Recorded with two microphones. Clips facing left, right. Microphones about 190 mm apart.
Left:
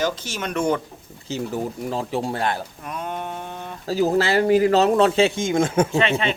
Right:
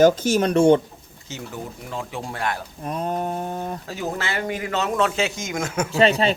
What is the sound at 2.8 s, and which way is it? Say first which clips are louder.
Speech: right 7 dB; 35° right (ahead or behind).